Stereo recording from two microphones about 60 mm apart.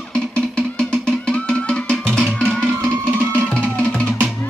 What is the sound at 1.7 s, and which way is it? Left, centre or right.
Music, centre.